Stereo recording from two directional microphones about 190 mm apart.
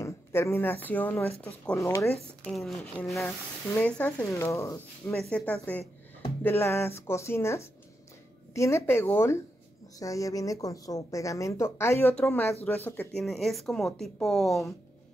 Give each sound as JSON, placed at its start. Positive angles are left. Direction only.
{"t": 0.0, "sound": "a woman's voice", "side_deg": 15}
{"t": 2.4, "sound": "a woman's voice", "side_deg": 0}